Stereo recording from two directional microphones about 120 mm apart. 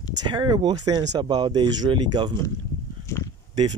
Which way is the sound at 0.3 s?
40° right (ahead or behind).